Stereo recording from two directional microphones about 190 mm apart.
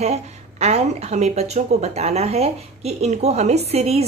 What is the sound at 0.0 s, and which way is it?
A woman's voice, 35° right (ahead or behind).